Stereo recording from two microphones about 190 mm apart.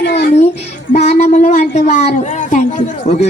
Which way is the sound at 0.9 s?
35° left (ahead or behind).